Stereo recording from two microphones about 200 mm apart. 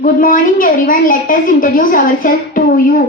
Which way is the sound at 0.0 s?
45° left (ahead or behind).